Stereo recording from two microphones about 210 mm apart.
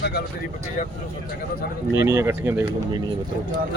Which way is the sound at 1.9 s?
10° right (ahead or behind).